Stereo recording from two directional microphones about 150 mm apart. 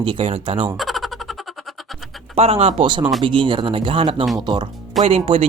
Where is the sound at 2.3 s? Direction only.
40° right (ahead or behind).